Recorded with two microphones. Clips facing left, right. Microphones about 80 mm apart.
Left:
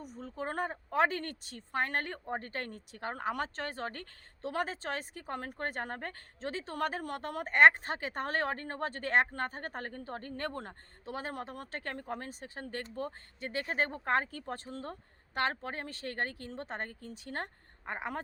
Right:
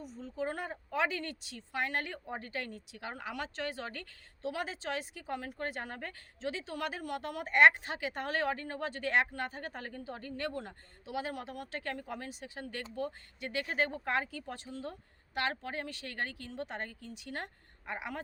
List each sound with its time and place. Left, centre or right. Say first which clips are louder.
0.0 s speech: right 2 dB; left